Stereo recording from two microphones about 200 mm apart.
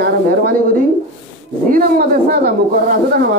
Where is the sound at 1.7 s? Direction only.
45° right (ahead or behind).